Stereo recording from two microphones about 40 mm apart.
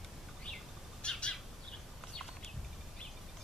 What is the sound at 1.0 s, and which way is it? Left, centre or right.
Bird, left.